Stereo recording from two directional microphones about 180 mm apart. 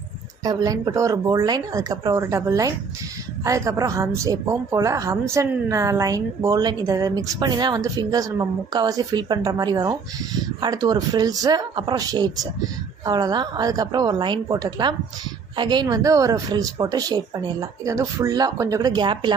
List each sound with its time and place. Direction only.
0.4 s a woman's voice: 20° right (ahead or behind)